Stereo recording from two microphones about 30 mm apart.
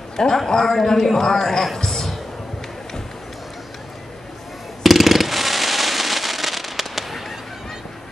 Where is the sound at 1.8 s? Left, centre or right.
Centre.